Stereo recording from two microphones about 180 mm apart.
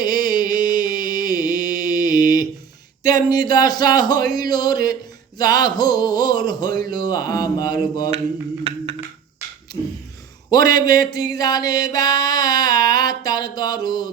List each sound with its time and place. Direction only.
0.0 s music: 20° left (ahead or behind)
3.0 s speech: 20° left (ahead or behind)
10.5 s a sound: 20° left (ahead or behind)